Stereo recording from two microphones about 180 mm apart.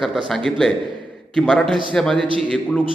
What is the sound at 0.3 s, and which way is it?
A man's voice, centre (ahead or behind).